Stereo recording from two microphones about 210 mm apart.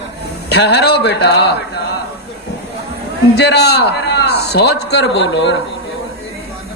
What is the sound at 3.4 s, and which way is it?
A man's voice, 50° left (ahead or behind).